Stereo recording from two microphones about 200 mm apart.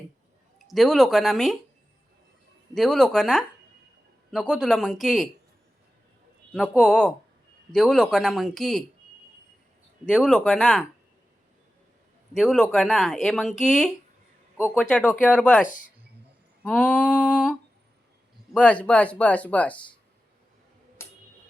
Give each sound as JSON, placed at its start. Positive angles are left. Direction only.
{"t": 0.7, "sound": "speech", "side_deg": 0}
{"t": 2.7, "sound": "speech", "side_deg": 0}
{"t": 6.5, "sound": "speech", "side_deg": 5}
{"t": 10.1, "sound": "speech", "side_deg": 5}
{"t": 12.3, "sound": "speech", "side_deg": 0}
{"t": 15.6, "sound": "speech", "side_deg": 40}
{"t": 16.6, "sound": "speech", "side_deg": 5}
{"t": 21.0, "sound": "tick-tock", "side_deg": 10}